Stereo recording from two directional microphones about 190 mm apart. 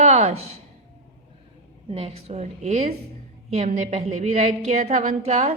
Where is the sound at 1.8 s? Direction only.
30° right (ahead or behind).